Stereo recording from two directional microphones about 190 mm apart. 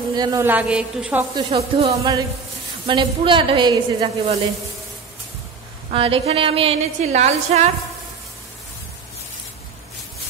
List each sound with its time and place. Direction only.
0.1 s a woman's voice: 20° right (ahead or behind)
1.3 s a woman's voice: 30° right (ahead or behind)
5.9 s a woman's voice: 30° right (ahead or behind)